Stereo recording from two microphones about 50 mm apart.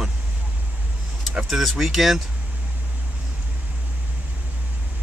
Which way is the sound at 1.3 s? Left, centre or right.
Centre.